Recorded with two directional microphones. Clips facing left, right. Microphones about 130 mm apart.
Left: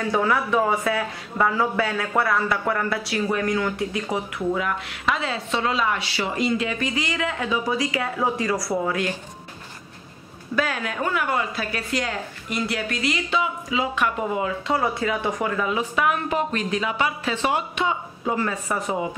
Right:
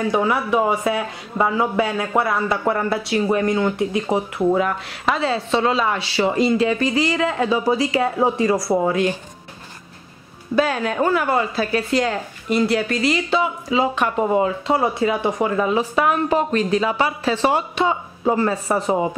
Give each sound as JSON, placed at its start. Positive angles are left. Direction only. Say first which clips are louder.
{"t": 0.0, "sound": "a woman's voice", "louder": "right 3 dB", "side_deg": -20}
{"t": 10.5, "sound": "a woman's voice", "louder": "right 6 dB", "side_deg": -30}